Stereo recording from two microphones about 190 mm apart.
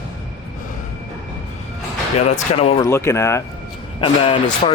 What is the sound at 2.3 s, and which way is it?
Speech, 35° left (ahead or behind).